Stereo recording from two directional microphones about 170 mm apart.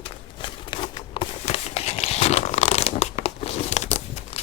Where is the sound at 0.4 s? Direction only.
30° left (ahead or behind).